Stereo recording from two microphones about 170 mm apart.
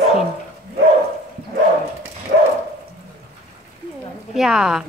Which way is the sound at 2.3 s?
55° right (ahead or behind).